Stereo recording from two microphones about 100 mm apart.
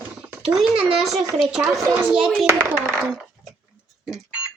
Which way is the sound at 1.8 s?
25° right (ahead or behind).